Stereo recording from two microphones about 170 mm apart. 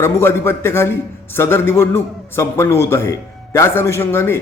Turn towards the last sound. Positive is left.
turn(degrees=15)  # may be behind; listen again after turning